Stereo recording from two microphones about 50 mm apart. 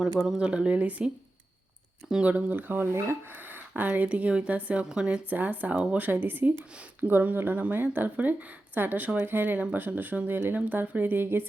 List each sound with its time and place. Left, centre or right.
0.0 s speech: centre
0.3 s speech: right
2.2 s a woman's voice: right; by 5.2 s centre
5.3 s a woman's voice: right